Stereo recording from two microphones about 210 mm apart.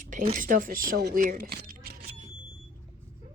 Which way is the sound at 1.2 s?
45° right (ahead or behind).